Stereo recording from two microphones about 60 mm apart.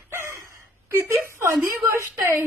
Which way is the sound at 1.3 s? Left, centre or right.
Right.